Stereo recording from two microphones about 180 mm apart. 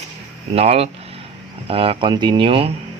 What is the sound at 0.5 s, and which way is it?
Speech, 35° right (ahead or behind).